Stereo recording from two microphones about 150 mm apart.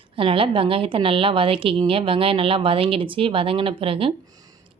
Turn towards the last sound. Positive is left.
turn(degrees=-40)  # may be behind; listen again after turning